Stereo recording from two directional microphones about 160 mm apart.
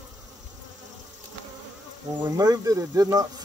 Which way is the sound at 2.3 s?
25° right (ahead or behind).